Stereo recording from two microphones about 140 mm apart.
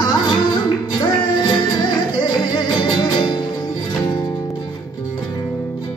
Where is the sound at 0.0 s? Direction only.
30° left (ahead or behind).